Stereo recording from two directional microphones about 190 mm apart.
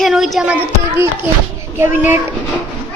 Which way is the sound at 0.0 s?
Centre (ahead or behind).